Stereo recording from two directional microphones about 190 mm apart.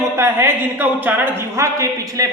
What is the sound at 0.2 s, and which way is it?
A woman's voice, 10° right (ahead or behind).